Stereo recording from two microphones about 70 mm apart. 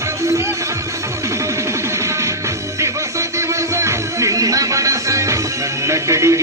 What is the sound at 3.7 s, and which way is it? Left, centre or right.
Music, right.